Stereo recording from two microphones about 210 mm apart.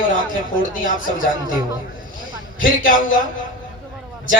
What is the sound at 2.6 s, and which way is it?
Speech, 40° left (ahead or behind).